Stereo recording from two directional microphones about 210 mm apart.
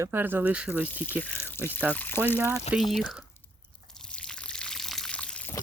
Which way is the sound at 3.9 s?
5° left (ahead or behind).